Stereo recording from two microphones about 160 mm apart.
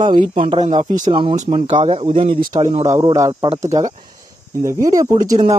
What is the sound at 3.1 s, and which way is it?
Speech, 25° right (ahead or behind).